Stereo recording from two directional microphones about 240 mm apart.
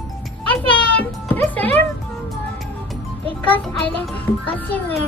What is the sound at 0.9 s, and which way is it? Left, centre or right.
Speech, centre.